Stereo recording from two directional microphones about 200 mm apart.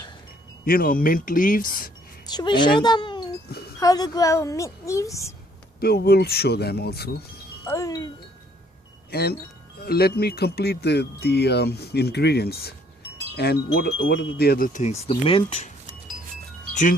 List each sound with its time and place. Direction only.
0.6 s speech: 50° left (ahead or behind)
2.2 s a woman's voice: 20° left (ahead or behind)
5.8 s speech: 50° left (ahead or behind)
7.7 s a woman's voice: 15° left (ahead or behind)
9.8 s speech: 50° left (ahead or behind)
13.3 s wind chime: 55° left (ahead or behind)
13.7 s speech: 65° left (ahead or behind); by 15.7 s 35° left (ahead or behind)